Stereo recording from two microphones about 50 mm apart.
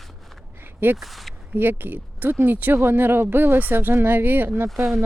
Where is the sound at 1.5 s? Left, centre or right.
Right.